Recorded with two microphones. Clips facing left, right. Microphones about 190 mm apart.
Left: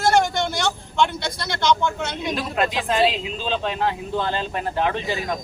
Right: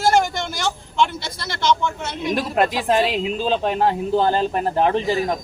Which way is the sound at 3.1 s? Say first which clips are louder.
Right 5 dB; 45° right (ahead or behind).